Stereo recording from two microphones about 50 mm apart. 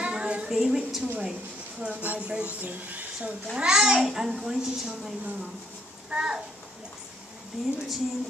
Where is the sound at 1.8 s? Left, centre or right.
Centre.